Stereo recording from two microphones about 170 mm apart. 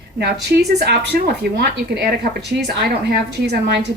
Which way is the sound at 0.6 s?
70° right (ahead or behind).